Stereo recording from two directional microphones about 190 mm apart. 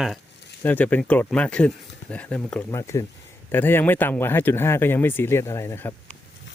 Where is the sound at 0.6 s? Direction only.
10° left (ahead or behind).